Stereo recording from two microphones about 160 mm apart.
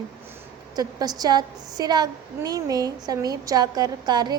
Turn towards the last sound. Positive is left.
turn(degrees=-25)  # may be behind; listen again after turning